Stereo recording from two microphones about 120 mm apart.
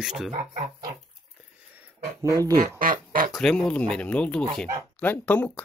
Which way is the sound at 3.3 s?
5° left (ahead or behind).